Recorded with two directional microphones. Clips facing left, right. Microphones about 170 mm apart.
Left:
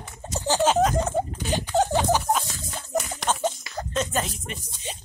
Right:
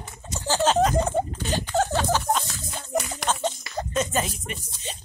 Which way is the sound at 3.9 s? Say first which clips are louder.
Right 1 dB; 5° right (ahead or behind).